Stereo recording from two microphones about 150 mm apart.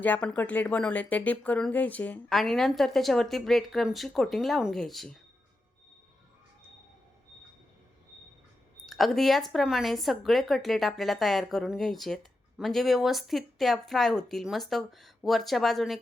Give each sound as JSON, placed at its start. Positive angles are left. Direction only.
{"t": 0.0, "sound": "a woman's voice", "side_deg": 10}
{"t": 8.9, "sound": "speech", "side_deg": 0}